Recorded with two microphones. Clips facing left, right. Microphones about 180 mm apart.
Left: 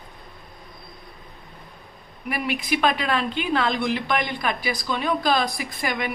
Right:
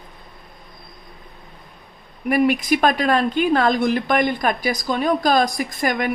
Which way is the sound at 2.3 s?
45° right (ahead or behind).